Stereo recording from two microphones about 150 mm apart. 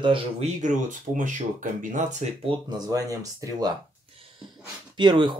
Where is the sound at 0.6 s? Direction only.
55° right (ahead or behind).